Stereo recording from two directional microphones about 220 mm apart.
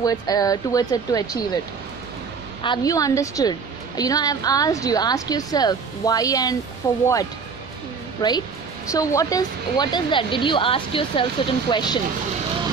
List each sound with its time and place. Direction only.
0.0 s a woman's voice: 15° left (ahead or behind)
2.6 s a woman's voice: 20° left (ahead or behind)
8.2 s speech: 20° left (ahead or behind)